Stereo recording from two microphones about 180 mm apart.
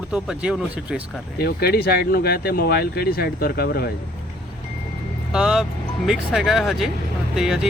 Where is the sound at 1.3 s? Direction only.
60° left (ahead or behind).